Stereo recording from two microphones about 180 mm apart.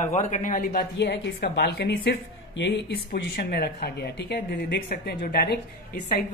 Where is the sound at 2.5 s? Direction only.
80° left.